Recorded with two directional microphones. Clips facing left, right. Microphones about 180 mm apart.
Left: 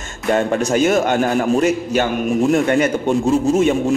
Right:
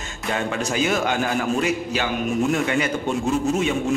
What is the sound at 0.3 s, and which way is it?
A man's voice, 45° left (ahead or behind).